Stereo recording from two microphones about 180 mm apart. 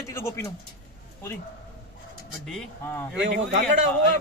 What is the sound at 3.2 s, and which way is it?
Speech, 75° right (ahead or behind).